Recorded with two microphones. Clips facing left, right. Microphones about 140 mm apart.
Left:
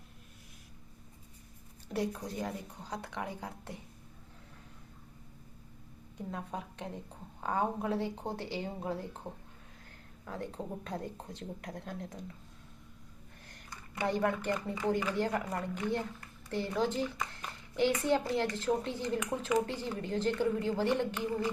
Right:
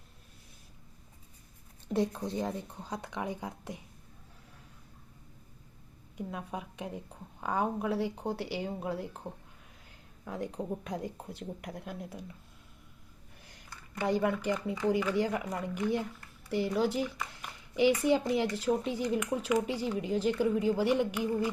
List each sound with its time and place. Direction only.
1.9 s speech: 25° right (ahead or behind)
6.1 s speech: 10° right (ahead or behind)
9.2 s speech: 15° left (ahead or behind)
10.2 s speech: 15° right (ahead or behind)
14.1 s speech: 10° right (ahead or behind)